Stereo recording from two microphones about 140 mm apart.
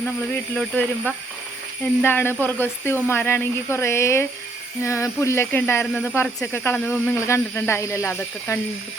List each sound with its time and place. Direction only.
0.0 s speech: 10° left (ahead or behind)